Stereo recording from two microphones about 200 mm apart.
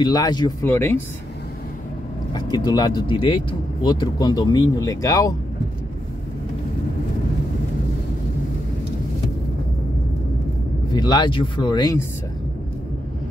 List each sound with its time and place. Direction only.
0.0 s speech: 20° left (ahead or behind)
2.3 s speech: 20° left (ahead or behind)
10.9 s speech: 20° left (ahead or behind)